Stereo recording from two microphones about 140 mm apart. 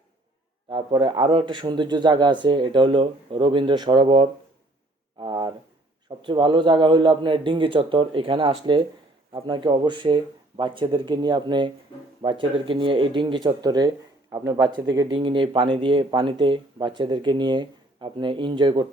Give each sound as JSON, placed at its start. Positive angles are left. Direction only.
{"t": 0.7, "sound": "speech", "side_deg": -40}